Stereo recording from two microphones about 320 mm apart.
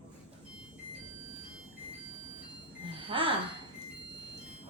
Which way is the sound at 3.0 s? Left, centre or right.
Centre.